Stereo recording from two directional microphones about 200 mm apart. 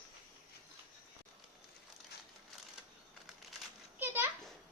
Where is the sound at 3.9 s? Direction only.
10° right (ahead or behind).